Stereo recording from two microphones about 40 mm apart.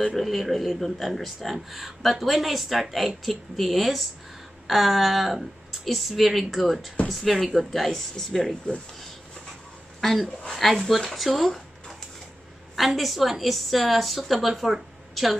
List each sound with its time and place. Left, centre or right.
0.1 s a man's voice: centre
8.7 s speech: left
9.9 s a woman's voice: centre
12.7 s a man's voice: centre